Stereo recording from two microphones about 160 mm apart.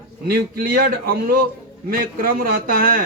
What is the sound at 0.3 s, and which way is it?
A man's voice, 70° right (ahead or behind).